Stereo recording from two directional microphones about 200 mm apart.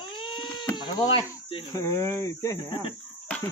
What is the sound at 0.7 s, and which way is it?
Speech, 25° left (ahead or behind).